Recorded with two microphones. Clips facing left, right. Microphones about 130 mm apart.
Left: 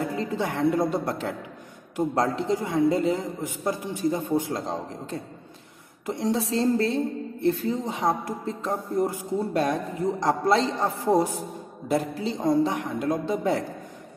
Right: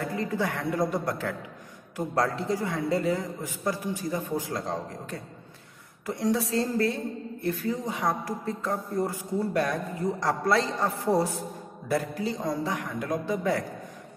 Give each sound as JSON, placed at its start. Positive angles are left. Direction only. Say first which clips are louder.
{"t": 0.0, "sound": "a woman's voice", "louder": "left 2 dB", "side_deg": 25}